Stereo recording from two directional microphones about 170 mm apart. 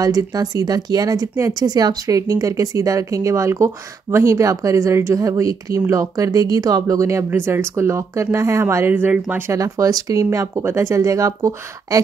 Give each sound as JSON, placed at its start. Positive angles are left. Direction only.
{"t": 0.0, "sound": "speech", "side_deg": -20}